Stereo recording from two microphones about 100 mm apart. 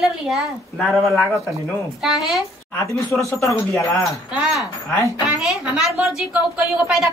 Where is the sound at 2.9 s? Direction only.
30° left (ahead or behind).